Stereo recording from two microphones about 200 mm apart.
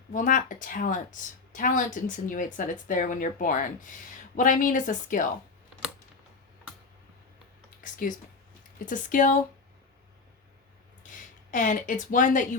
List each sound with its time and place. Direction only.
0.1 s speech: 40° left (ahead or behind)
7.8 s speech: 40° left (ahead or behind)
11.5 s speech: 40° left (ahead or behind)